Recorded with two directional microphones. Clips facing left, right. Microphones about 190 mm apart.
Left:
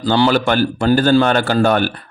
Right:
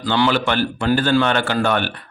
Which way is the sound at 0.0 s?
35° left (ahead or behind).